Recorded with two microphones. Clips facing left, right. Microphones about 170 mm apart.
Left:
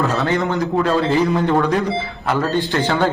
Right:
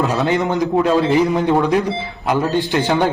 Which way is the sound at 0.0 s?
20° right (ahead or behind).